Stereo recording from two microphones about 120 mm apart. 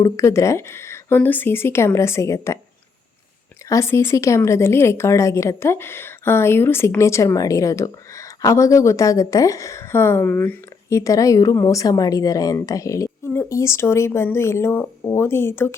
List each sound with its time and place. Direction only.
0.0 s speech: 25° left (ahead or behind)
3.7 s speech: 25° left (ahead or behind)